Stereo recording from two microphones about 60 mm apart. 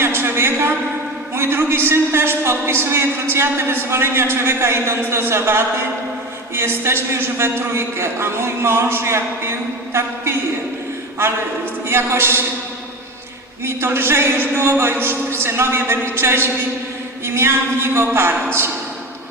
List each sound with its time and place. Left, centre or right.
0.0 s a sound: right
1.4 s a man's voice: right
11.9 s a man's voice: right
13.7 s a man's voice: right